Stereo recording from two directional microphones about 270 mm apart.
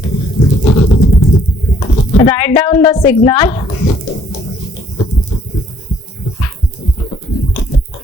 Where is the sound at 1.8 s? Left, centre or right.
Centre.